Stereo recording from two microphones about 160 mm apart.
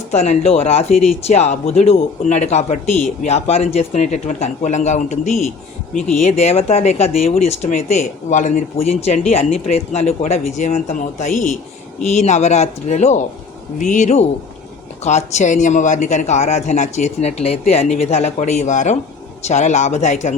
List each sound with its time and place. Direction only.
0.1 s speech: 45° left (ahead or behind)